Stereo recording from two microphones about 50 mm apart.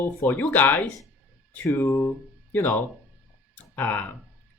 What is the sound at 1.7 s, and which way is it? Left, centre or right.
Speech, left.